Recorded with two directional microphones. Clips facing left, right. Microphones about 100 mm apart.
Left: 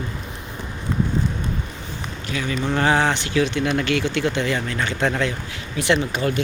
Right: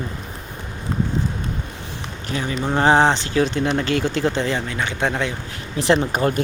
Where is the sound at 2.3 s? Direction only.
30° right (ahead or behind).